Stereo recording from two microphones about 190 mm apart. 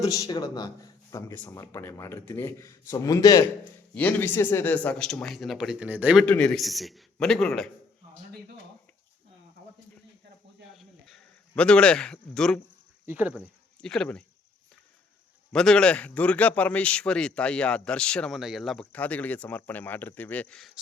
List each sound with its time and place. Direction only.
0.0 s speech: 20° left (ahead or behind)
1.1 s speech: 10° left (ahead or behind); by 6.2 s 10° right (ahead or behind)
6.2 s speech: 5° left (ahead or behind)
10.8 s a sound: centre (ahead or behind)
13.1 s speech: 10° right (ahead or behind)
13.8 s speech: 5° left (ahead or behind)
15.5 s speech: 5° left (ahead or behind)